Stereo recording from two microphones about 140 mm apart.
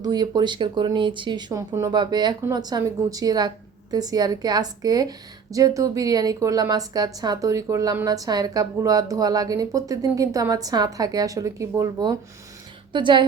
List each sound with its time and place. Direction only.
0.0 s a woman's voice: 30° right (ahead or behind)